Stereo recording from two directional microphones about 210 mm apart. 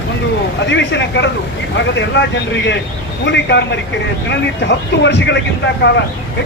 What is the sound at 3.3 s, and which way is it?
Speech, 55° left (ahead or behind).